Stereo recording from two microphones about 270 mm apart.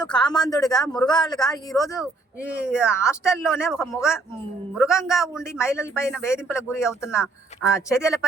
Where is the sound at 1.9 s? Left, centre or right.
Centre.